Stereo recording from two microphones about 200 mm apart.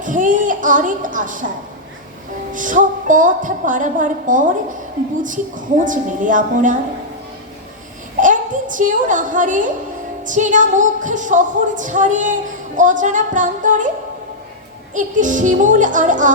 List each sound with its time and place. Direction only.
0.0 s speech: 40° right (ahead or behind)
2.5 s speech: 40° right (ahead or behind)
8.2 s a child's voice: 40° right (ahead or behind)
14.9 s speech: 40° right (ahead or behind)